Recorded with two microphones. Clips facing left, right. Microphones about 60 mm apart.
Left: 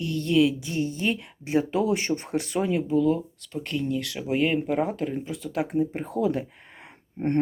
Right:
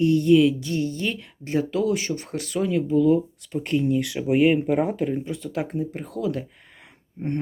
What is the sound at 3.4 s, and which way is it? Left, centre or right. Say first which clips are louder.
Speech: right 6 dB; centre.